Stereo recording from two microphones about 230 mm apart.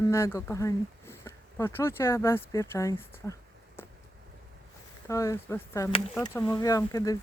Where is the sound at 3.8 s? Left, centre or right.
Centre.